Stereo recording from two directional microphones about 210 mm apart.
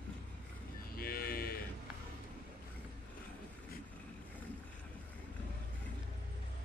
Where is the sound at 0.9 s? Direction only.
45° left (ahead or behind).